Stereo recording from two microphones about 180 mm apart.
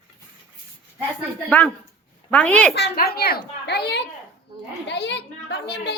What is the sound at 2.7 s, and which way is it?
A child's voice, 65° left (ahead or behind).